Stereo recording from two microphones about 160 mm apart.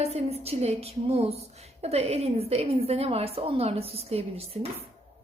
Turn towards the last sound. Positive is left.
turn(degrees=-40)  # may be behind; listen again after turning